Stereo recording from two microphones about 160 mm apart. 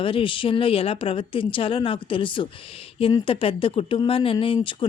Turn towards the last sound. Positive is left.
turn(degrees=35)  # may be behind; listen again after turning